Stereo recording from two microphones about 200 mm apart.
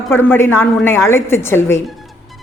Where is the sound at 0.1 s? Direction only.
10° left (ahead or behind).